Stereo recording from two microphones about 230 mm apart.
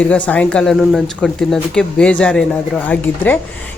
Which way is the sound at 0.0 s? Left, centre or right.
Centre.